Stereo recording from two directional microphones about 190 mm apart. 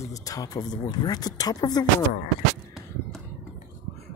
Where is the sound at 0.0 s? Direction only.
20° left (ahead or behind).